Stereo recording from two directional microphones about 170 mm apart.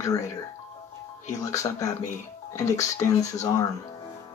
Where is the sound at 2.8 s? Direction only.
20° left (ahead or behind).